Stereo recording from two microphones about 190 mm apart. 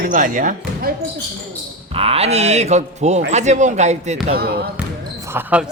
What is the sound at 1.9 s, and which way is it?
Speech, 30° right (ahead or behind).